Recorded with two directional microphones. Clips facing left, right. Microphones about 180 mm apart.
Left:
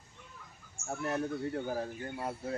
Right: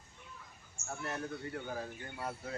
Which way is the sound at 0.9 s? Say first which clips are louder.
Left 6 dB; 35° left (ahead or behind).